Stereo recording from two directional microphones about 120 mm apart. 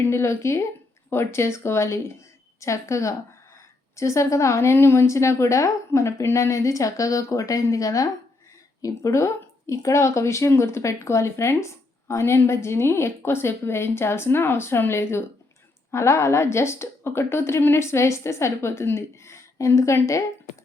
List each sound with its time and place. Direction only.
0.0 s speech: 20° left (ahead or behind)